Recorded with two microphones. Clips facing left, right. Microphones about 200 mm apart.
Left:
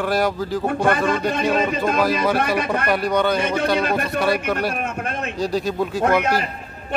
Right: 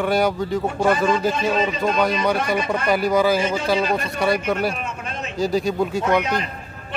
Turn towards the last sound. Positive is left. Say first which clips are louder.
# left 1 dB
turn(degrees=0)  # may be behind; listen again after turning